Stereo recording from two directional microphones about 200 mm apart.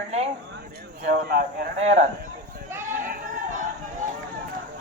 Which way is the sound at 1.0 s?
45° right (ahead or behind).